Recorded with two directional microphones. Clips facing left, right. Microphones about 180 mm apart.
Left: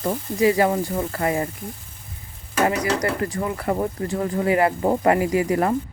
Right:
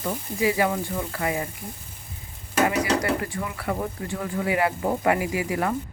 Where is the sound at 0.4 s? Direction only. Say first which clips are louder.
Left 5 dB; 40° left (ahead or behind).